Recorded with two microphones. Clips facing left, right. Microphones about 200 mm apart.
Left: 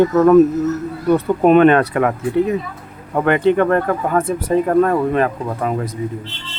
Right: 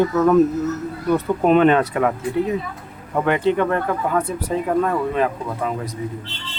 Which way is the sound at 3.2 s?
55° left (ahead or behind).